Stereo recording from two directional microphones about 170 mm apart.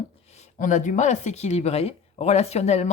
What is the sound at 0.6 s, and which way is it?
Speech, 50° left (ahead or behind).